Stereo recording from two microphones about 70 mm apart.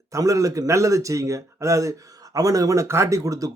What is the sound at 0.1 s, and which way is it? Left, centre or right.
Speech, right.